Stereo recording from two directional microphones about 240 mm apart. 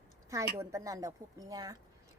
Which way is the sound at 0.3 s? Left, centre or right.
Centre.